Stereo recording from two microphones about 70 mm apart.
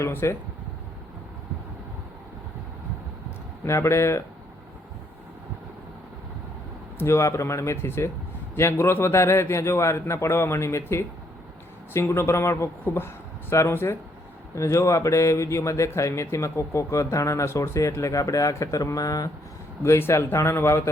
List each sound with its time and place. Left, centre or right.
0.0 s a man's voice: left
3.6 s a man's voice: left
7.0 s a man's voice: left
14.5 s speech: left
19.8 s a man's voice: left